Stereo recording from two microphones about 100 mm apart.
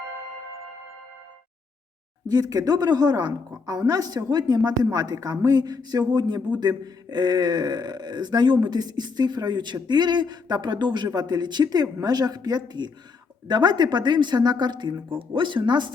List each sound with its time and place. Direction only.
2.2 s a woman's voice: 40° right (ahead or behind)